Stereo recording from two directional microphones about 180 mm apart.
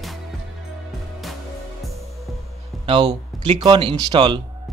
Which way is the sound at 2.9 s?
25° right (ahead or behind).